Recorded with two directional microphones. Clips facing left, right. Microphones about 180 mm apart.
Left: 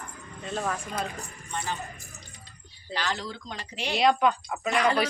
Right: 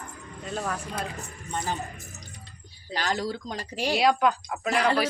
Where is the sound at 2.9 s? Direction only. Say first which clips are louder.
Right 4 dB; 40° right (ahead or behind).